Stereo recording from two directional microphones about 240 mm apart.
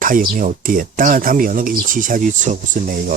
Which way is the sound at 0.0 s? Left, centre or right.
Right.